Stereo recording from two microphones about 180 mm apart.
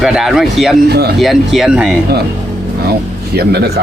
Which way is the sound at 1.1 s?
Centre (ahead or behind).